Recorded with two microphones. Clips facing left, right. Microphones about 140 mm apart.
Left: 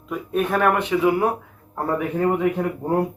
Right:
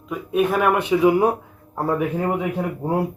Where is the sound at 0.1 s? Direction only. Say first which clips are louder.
Right 2 dB; 5° right (ahead or behind).